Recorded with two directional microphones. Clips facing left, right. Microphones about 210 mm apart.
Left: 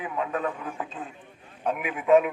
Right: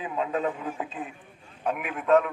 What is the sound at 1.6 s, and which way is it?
Speech, centre (ahead or behind).